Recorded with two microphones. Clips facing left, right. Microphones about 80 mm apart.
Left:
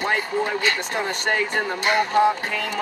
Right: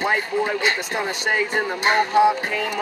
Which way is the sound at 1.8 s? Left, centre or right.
Right.